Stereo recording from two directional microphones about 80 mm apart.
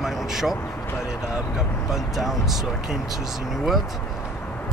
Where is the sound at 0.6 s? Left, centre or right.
Left.